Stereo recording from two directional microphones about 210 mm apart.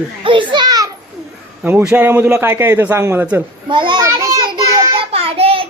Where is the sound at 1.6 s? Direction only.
5° right (ahead or behind).